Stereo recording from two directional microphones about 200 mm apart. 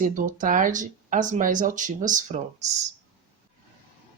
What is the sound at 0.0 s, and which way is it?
Speech, 40° right (ahead or behind).